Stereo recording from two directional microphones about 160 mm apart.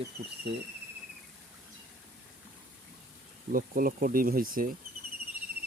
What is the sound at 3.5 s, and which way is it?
Speech, 60° right (ahead or behind).